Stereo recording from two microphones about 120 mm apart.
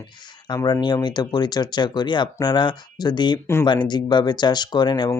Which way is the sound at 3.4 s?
20° left (ahead or behind).